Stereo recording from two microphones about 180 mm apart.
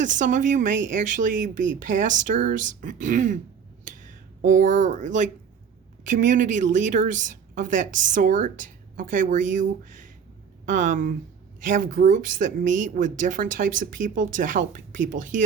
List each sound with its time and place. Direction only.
0.0 s speech: 45° right (ahead or behind)
3.8 s a sound: 45° right (ahead or behind)
6.1 s speech: 45° right (ahead or behind)
10.7 s speech: 45° right (ahead or behind)